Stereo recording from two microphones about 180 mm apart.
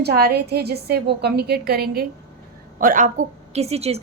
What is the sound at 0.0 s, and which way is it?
A woman's voice, 60° right (ahead or behind).